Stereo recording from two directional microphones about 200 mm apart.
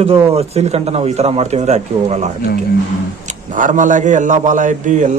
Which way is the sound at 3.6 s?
40° right (ahead or behind).